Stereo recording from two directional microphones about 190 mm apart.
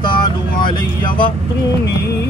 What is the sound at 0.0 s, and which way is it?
Vehicle, 25° left (ahead or behind).